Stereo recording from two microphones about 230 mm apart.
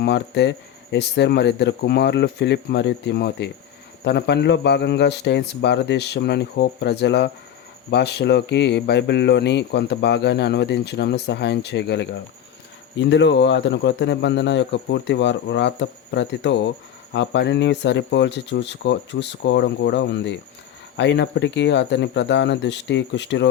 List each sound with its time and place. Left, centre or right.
0.0 s speech: left